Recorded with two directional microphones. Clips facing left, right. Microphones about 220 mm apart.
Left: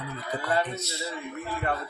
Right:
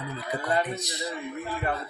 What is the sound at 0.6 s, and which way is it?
Speech, 15° right (ahead or behind).